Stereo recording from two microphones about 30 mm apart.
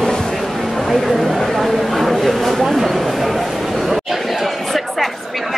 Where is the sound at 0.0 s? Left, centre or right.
Centre.